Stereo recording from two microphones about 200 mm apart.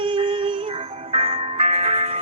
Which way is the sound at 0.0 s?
25° right (ahead or behind).